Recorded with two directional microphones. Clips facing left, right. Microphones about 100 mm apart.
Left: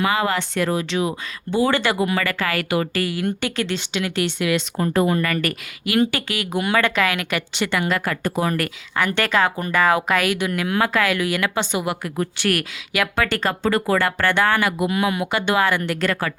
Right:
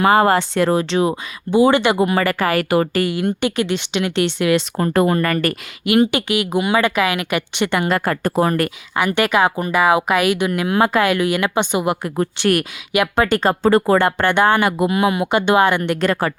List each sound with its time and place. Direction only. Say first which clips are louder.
0.0 s speech: right 7 dB; 45° right (ahead or behind)
1.5 s a woman's voice: right 6 dB; 15° right (ahead or behind)
2.0 s speech: right 5 dB; 35° right (ahead or behind)
3.0 s a woman's voice: right 4 dB; 20° right (ahead or behind)
4.8 s speech: even; 50° right (ahead or behind)
5.8 s a woman's voice: right 5 dB; 20° right (ahead or behind)
7.6 s speech: right 3 dB; 25° right (ahead or behind); by 8.5 s 40° right (ahead or behind)
9.0 s speech: right 3 dB; 15° right (ahead or behind)
13.5 s speech: right 7 dB; 35° right (ahead or behind)